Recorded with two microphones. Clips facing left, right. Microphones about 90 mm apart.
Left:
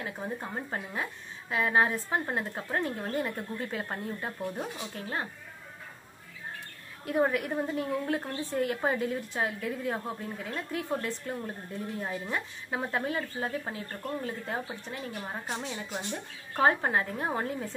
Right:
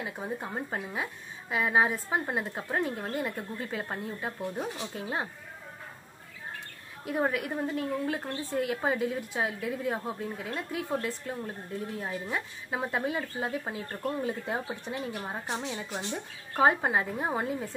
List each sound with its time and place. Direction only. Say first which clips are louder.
0.0 s a woman's voice: right 1 dB; 10° right (ahead or behind)
4.9 s speech: even; 15° right (ahead or behind)
7.1 s a woman's voice: left 2 dB; centre (ahead or behind)
15.4 s a woman's voice: right 2 dB; 20° right (ahead or behind)
16.5 s speech: right 1 dB; 10° right (ahead or behind)